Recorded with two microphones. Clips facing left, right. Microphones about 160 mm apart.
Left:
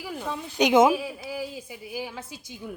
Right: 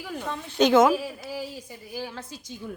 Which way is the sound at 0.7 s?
15° left (ahead or behind).